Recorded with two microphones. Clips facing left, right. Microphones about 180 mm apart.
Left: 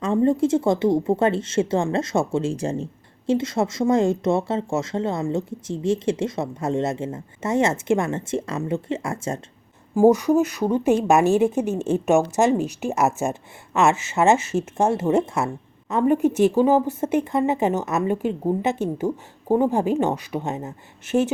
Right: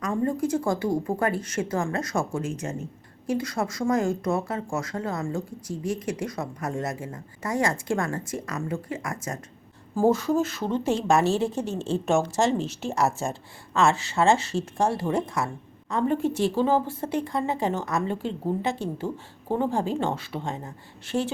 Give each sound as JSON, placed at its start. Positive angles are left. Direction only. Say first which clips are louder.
{"t": 0.0, "sound": "speech", "louder": "left 7 dB", "side_deg": 25}
{"t": 9.9, "sound": "a woman's voice", "louder": "left 6 dB", "side_deg": 15}